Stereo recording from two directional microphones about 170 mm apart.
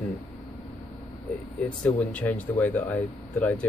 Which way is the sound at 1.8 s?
10° left (ahead or behind).